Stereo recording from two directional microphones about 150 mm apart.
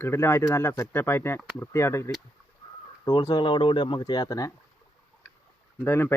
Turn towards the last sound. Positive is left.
turn(degrees=15)  # may be behind; listen again after turning